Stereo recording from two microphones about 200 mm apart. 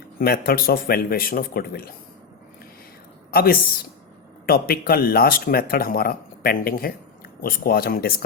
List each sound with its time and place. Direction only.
0.2 s speech: 50° left (ahead or behind)
3.3 s speech: 50° left (ahead or behind)